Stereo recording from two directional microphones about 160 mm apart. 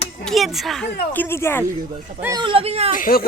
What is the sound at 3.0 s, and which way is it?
Speech, 65° left (ahead or behind).